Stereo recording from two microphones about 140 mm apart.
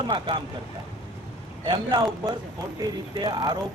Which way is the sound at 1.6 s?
35° right (ahead or behind).